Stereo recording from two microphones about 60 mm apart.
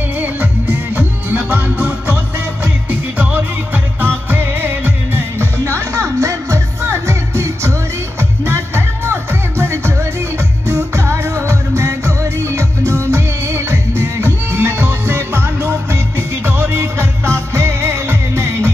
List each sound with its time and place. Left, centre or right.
0.2 s music: right
5.6 s music: right